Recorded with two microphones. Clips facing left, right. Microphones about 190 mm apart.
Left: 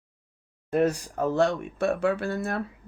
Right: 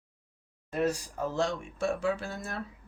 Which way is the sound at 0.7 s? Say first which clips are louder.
Left 6 dB; 60° left (ahead or behind).